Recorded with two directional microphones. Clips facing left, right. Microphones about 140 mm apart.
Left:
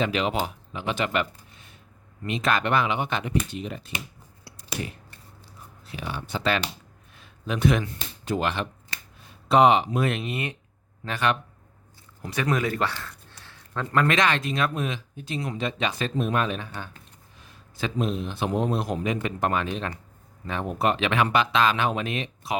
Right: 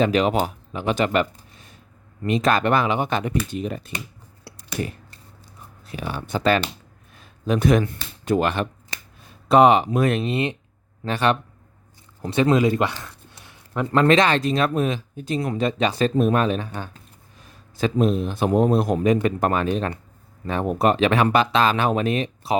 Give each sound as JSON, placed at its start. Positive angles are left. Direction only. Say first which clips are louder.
{"t": 0.0, "sound": "speech", "louder": "right 6 dB", "side_deg": -40}
{"t": 4.5, "sound": "a sound", "louder": "right 5 dB", "side_deg": -65}
{"t": 5.8, "sound": "a man's voice", "louder": "right 4 dB", "side_deg": -45}
{"t": 10.2, "sound": "speech", "louder": "right 7 dB", "side_deg": -25}
{"t": 14.0, "sound": "a man's voice", "louder": "right 6 dB", "side_deg": -30}